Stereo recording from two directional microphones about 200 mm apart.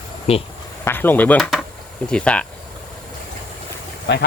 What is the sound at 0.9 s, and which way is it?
Speech, 10° left (ahead or behind).